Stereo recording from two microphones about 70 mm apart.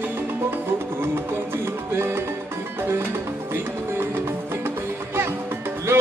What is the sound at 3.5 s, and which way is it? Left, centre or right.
Music, right.